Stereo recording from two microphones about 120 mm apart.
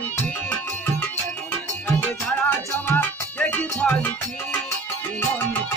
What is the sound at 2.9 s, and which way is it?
Salsa music, 15° left (ahead or behind).